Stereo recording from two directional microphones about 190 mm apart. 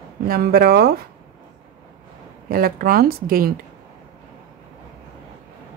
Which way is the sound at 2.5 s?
50° right (ahead or behind).